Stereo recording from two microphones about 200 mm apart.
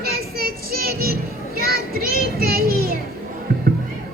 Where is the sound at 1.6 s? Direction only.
50° right (ahead or behind).